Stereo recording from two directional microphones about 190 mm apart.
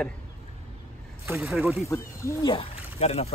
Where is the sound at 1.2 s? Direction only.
15° right (ahead or behind).